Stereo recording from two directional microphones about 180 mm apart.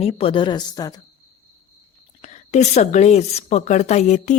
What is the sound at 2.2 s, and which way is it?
A woman's voice, 40° left (ahead or behind).